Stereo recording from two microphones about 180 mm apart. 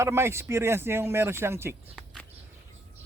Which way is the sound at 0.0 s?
15° right (ahead or behind).